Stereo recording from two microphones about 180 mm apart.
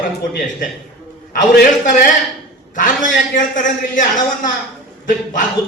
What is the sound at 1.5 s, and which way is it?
Speech, 55° left (ahead or behind).